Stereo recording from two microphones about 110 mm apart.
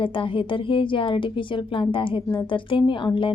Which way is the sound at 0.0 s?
50° left (ahead or behind).